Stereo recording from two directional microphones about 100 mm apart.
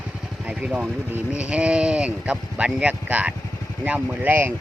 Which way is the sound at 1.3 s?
10° right (ahead or behind).